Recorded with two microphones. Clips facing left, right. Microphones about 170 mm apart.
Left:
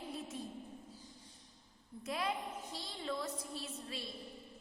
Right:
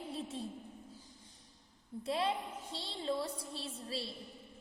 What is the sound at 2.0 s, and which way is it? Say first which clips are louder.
Music: right 4 dB; 30° right (ahead or behind).